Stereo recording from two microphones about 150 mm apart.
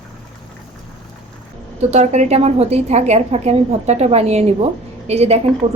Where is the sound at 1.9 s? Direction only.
45° right (ahead or behind).